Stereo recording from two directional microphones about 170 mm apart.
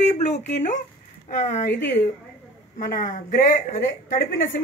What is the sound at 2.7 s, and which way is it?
Speech, 50° left (ahead or behind).